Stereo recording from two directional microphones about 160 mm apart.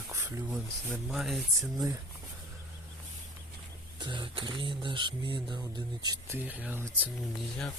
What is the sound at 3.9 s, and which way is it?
Speech, 30° right (ahead or behind).